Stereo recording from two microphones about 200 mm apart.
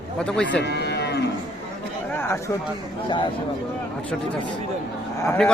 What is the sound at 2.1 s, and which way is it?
Chatter, 10° left (ahead or behind).